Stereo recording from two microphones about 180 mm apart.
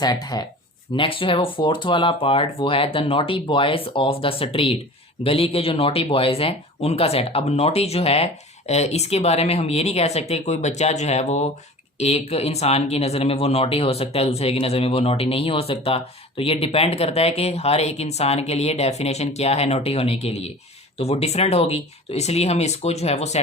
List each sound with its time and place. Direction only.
0.0 s speech: 20° left (ahead or behind); by 23.4 s 35° left (ahead or behind)